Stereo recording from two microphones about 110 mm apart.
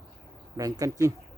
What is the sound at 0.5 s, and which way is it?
Speech, 30° right (ahead or behind).